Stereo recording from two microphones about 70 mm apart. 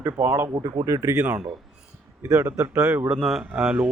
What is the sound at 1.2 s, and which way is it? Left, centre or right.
Speech, right.